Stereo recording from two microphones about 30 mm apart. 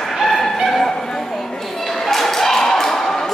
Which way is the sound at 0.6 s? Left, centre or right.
Centre.